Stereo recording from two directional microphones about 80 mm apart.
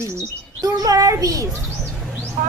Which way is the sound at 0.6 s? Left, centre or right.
Right.